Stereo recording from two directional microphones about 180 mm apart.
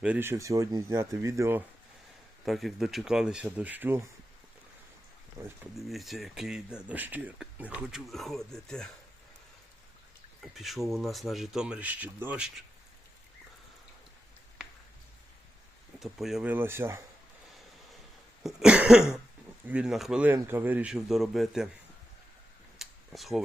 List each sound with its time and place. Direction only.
0.0 s speech: 10° right (ahead or behind)
2.4 s speech: centre (ahead or behind)
5.4 s speech: 15° right (ahead or behind)
5.7 s speech: centre (ahead or behind)
10.4 s speech: centre (ahead or behind)
16.0 s speech: centre (ahead or behind)
18.4 s speech: 5° right (ahead or behind)
22.8 s a sound: centre (ahead or behind)